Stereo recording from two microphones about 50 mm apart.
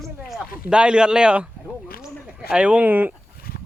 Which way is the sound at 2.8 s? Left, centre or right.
Right.